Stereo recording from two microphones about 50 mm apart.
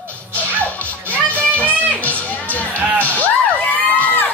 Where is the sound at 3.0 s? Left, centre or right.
Left.